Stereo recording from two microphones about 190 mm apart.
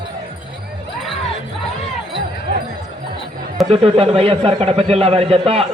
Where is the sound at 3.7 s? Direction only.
30° right (ahead or behind).